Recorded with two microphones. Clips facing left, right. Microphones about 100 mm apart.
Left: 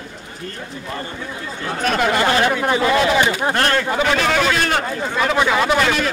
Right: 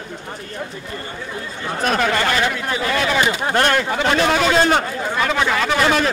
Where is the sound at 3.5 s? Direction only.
20° right (ahead or behind).